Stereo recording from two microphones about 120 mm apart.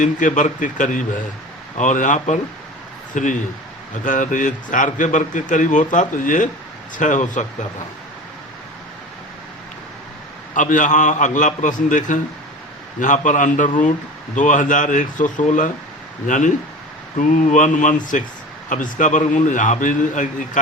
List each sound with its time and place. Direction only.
0.0 s a man's voice: 90° left
3.1 s a man's voice: 90° left
10.5 s a man's voice: 90° left